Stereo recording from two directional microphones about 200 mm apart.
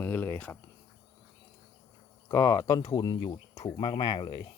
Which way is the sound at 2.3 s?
15° left (ahead or behind).